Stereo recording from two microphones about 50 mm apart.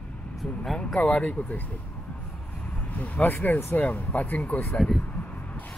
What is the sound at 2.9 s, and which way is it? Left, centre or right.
Speech, left.